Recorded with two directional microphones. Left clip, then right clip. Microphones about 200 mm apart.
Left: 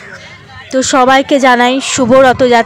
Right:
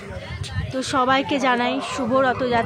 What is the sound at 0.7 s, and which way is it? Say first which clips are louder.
A woman's voice: left 12 dB; 40° left (ahead or behind).